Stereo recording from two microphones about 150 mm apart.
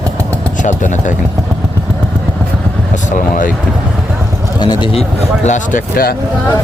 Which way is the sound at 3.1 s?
60° left (ahead or behind).